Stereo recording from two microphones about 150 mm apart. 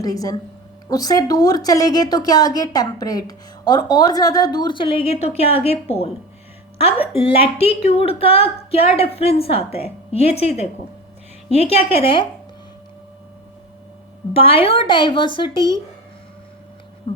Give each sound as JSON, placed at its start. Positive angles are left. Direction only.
{"t": 0.0, "sound": "a woman's voice", "side_deg": 25}
{"t": 7.2, "sound": "a woman's voice", "side_deg": 40}
{"t": 14.3, "sound": "a woman's voice", "side_deg": 40}
{"t": 17.1, "sound": "hum", "side_deg": 35}